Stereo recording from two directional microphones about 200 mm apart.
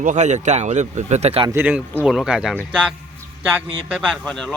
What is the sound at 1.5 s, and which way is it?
Speech, 10° right (ahead or behind).